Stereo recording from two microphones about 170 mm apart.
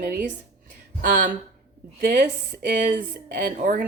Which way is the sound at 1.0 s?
50° right (ahead or behind).